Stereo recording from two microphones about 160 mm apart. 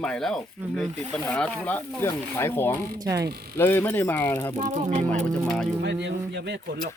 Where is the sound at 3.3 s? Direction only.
75° right (ahead or behind).